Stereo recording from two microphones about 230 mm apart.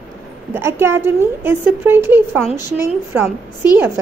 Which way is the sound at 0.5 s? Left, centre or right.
Centre.